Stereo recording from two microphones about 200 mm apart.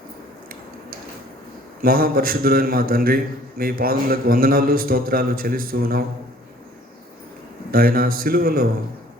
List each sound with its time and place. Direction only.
1.8 s a man's voice: 45° right (ahead or behind)
7.7 s a man's voice: 45° right (ahead or behind)